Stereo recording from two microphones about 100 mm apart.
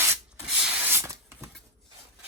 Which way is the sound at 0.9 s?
25° right (ahead or behind).